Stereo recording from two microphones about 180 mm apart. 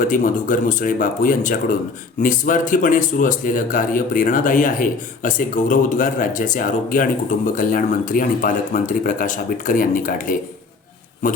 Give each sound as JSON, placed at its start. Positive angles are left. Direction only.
{"t": 0.0, "sound": "speech", "side_deg": 45}